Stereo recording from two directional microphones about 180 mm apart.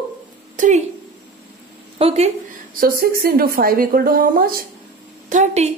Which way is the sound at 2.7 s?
55° right (ahead or behind).